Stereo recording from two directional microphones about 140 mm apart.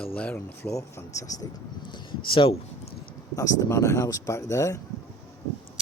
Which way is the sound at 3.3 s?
25° left (ahead or behind).